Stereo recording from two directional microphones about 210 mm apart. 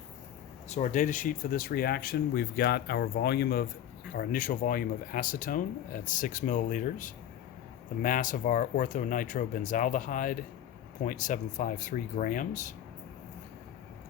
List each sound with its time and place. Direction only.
0.7 s speech: 35° left (ahead or behind)